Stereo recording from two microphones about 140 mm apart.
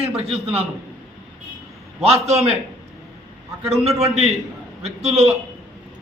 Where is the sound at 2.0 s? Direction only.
50° right (ahead or behind).